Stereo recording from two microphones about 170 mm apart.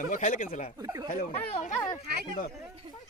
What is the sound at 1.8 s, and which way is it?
Speech, 25° left (ahead or behind).